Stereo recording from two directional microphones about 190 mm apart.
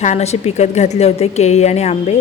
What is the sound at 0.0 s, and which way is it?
A woman's voice, 35° left (ahead or behind).